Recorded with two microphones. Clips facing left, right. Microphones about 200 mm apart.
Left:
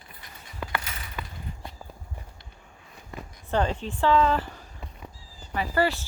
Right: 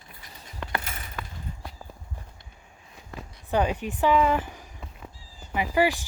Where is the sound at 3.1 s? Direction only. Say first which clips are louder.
Left 1 dB; centre (ahead or behind).